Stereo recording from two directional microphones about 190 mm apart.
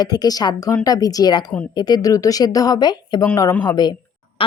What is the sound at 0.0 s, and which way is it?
Speech, 20° left (ahead or behind).